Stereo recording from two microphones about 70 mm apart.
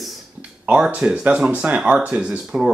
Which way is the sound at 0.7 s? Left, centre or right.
Centre.